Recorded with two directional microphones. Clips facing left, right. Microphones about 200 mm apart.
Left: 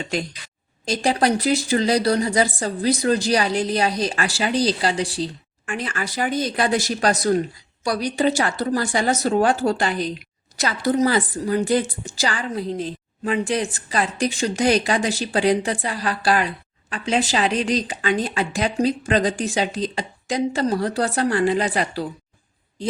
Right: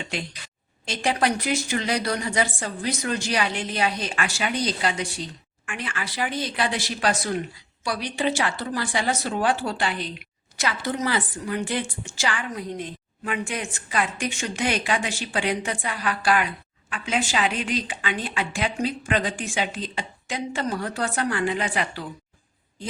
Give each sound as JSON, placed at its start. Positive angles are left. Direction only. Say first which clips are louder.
{"t": 0.9, "sound": "a woman's voice", "louder": "left 4 dB", "side_deg": 35}